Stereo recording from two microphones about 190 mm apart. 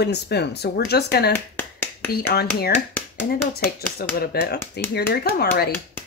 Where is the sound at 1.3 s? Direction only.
10° left (ahead or behind).